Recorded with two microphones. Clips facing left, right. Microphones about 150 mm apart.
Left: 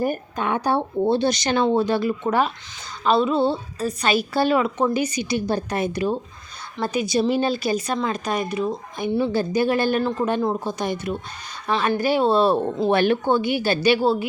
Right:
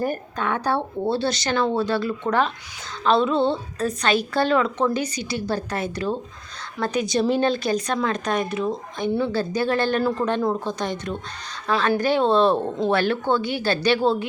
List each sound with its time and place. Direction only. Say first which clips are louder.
0.0 s a woman's voice: left 1 dB; 15° left (ahead or behind)
9.0 s speech: left 2 dB; 10° left (ahead or behind)
10.0 s a woman's voice: even; 5° right (ahead or behind)
10.2 s speech: even; 10° left (ahead or behind)